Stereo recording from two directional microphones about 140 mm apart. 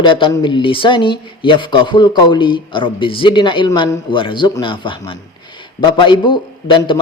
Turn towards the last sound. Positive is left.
turn(degrees=35)  # may be behind; listen again after turning